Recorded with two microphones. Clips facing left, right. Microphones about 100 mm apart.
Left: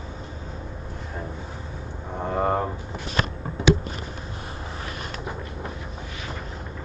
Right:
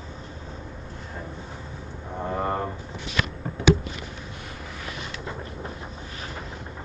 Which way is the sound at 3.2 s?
40° left (ahead or behind).